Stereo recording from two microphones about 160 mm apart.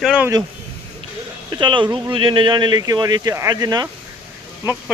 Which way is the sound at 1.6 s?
30° right (ahead or behind).